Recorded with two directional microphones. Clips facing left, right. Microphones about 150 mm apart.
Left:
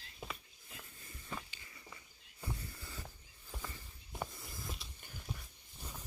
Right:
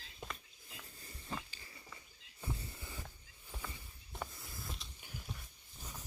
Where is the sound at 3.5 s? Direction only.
10° left (ahead or behind); by 5.4 s 5° right (ahead or behind).